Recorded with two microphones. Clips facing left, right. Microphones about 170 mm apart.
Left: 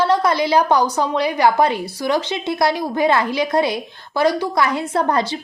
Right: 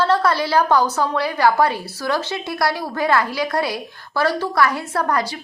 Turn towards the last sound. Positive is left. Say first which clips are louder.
# left 3 dB
turn(degrees=25)  # may be behind; listen again after turning